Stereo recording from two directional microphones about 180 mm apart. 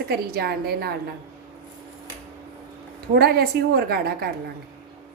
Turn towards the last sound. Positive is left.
turn(degrees=-60)  # may be behind; listen again after turning